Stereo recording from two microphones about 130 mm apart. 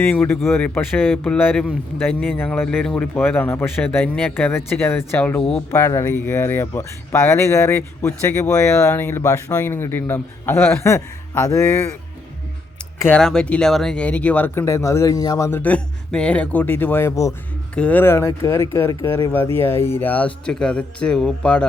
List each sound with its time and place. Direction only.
0.0 s speech: 15° left (ahead or behind)
13.1 s speech: 5° left (ahead or behind); by 15.4 s 30° left (ahead or behind)
15.4 s speech: 15° left (ahead or behind)
17.7 s speech: 10° left (ahead or behind)